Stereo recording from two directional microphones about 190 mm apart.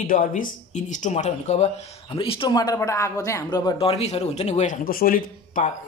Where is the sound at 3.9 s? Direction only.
35° left (ahead or behind).